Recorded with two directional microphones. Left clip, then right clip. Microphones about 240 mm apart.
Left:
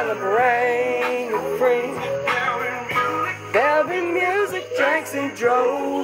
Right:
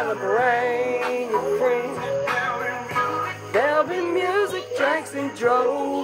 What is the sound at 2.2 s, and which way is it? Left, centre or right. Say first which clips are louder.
Music: left 3 dB; left.